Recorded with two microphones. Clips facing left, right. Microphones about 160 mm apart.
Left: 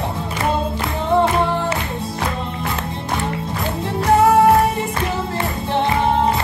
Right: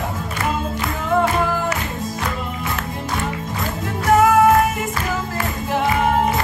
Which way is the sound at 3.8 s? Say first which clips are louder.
Left 1 dB; 30° left (ahead or behind).